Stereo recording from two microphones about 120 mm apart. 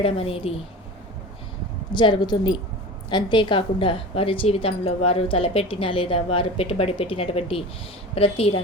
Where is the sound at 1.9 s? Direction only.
40° left (ahead or behind).